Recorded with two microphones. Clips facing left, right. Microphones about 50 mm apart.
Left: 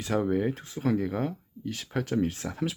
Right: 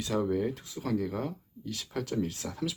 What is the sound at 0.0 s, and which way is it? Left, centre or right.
Speech, left.